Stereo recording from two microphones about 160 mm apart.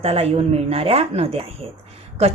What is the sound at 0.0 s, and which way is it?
A woman's voice, 40° right (ahead or behind).